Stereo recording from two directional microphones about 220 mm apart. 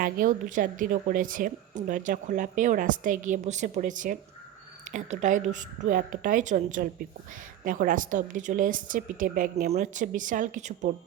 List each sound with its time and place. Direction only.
0.0 s a woman's voice: 35° right (ahead or behind)